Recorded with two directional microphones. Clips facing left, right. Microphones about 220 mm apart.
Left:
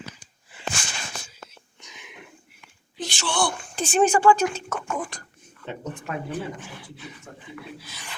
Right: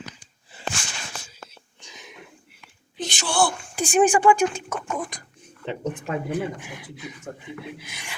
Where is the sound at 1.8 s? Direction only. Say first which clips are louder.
Right 2 dB; 35° right (ahead or behind).